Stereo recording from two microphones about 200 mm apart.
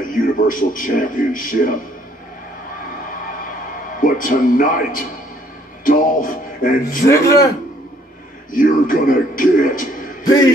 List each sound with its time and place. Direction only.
0.5 s speech: 40° left (ahead or behind)
4.0 s speech: 40° left (ahead or behind)
7.1 s a man's voice: 15° left (ahead or behind)
8.5 s speech: 40° left (ahead or behind)
10.2 s a man's voice: 20° left (ahead or behind)